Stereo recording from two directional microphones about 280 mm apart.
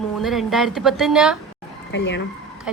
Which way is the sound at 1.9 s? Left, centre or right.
Left.